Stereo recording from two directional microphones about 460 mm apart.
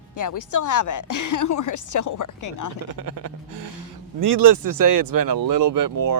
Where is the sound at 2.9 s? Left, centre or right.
Right.